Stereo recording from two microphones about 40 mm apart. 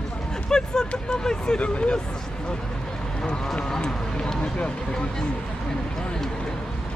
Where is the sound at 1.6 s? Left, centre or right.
Left.